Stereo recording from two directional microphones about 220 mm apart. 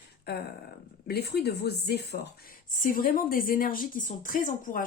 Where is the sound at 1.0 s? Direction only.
45° left (ahead or behind).